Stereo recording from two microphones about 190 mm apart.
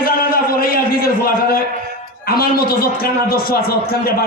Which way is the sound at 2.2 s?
50° left (ahead or behind).